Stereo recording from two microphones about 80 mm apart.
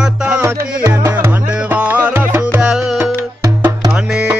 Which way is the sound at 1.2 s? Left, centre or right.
Right.